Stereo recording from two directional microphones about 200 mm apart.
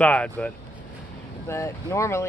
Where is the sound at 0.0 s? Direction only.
5° left (ahead or behind).